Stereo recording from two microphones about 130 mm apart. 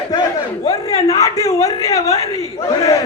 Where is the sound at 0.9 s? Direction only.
25° left (ahead or behind).